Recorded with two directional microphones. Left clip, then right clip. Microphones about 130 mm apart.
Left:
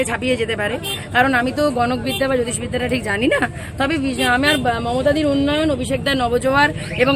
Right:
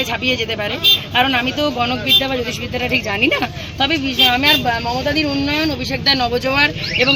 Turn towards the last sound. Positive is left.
turn(degrees=35)  # may be behind; listen again after turning